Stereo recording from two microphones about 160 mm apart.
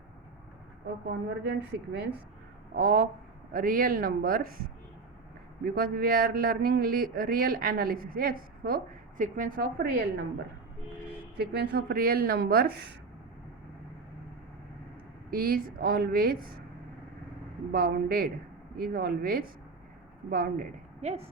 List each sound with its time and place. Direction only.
1.5 s a woman's voice: 90° right
2.7 s speech: 65° right (ahead or behind)
5.6 s speech: 70° right (ahead or behind)
11.3 s speech: 90° right; by 12.8 s 75° right (ahead or behind)
15.3 s speech: 65° right (ahead or behind)
17.7 s speech: 65° right (ahead or behind)
18.8 s speech: 75° right (ahead or behind)